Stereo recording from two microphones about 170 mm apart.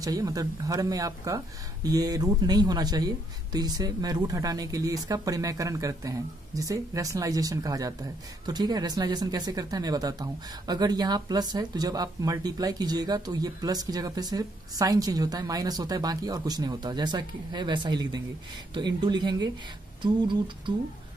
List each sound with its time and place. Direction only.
0.0 s speech: 20° right (ahead or behind)